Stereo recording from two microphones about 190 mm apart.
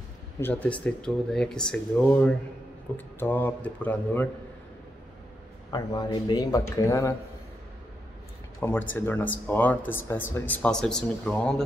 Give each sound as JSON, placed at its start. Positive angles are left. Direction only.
{"t": 0.4, "sound": "speech", "side_deg": 10}
{"t": 5.7, "sound": "speech", "side_deg": 20}
{"t": 8.5, "sound": "speech", "side_deg": 10}